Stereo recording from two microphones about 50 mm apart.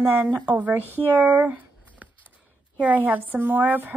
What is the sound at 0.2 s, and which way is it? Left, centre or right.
Speech, right.